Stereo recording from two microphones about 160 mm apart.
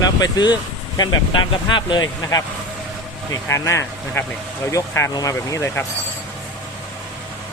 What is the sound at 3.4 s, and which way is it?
Speech, 15° left (ahead or behind).